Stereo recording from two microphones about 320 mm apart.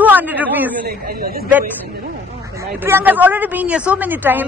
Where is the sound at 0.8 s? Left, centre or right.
Right.